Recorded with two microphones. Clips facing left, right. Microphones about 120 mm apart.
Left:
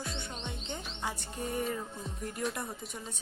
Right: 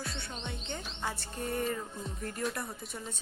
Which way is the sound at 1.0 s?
15° left (ahead or behind).